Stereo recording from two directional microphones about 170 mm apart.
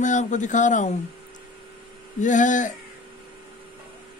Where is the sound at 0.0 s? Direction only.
45° left (ahead or behind).